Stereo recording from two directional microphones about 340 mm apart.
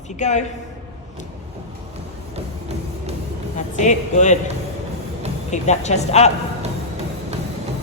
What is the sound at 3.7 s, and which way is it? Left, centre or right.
Speech, left.